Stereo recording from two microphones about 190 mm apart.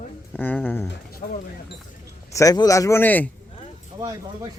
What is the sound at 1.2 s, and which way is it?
Speech, 50° left (ahead or behind).